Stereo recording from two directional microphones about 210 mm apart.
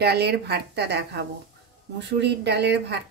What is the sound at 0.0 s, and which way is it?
A woman's voice, 50° right (ahead or behind).